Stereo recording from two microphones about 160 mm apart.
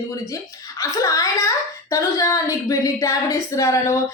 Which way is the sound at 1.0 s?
20° left (ahead or behind).